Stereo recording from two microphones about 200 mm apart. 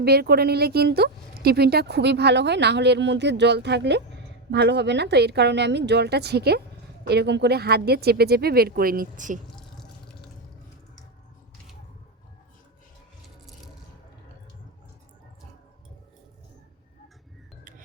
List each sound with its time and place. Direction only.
0.0 s speech: 50° right (ahead or behind)